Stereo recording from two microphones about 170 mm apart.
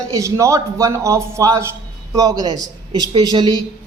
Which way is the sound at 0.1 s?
20° right (ahead or behind).